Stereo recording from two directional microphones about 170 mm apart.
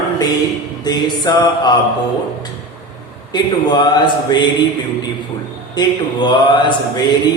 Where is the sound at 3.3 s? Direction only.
25° left (ahead or behind).